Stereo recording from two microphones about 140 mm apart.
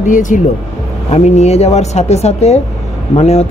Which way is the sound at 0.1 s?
65° left (ahead or behind).